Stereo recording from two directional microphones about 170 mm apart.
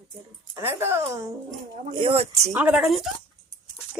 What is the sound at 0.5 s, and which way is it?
Speech, 15° right (ahead or behind).